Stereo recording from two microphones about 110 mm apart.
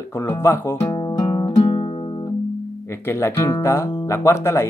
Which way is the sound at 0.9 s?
45° left (ahead or behind).